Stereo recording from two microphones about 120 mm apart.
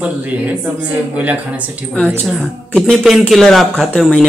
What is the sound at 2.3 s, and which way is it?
Speech, centre (ahead or behind).